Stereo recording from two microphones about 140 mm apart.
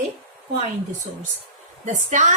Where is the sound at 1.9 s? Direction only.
65° right (ahead or behind).